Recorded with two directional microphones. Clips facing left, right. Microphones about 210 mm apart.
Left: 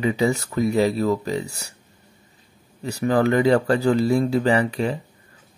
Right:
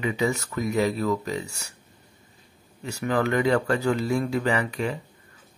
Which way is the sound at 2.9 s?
35° left (ahead or behind).